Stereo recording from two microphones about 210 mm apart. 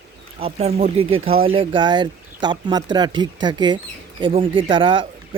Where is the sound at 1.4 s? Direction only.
25° right (ahead or behind).